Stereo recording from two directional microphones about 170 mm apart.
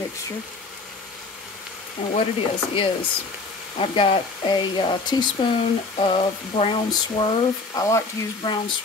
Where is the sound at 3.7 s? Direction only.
30° left (ahead or behind).